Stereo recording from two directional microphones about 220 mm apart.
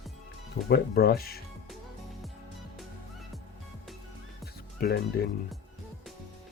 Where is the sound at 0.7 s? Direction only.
45° left (ahead or behind).